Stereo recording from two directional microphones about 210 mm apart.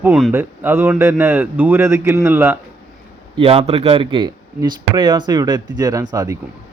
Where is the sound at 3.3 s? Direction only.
25° right (ahead or behind).